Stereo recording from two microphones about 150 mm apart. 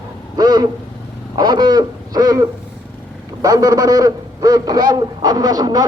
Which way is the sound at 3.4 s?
25° right (ahead or behind).